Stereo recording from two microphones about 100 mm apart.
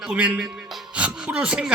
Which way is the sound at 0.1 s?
10° right (ahead or behind).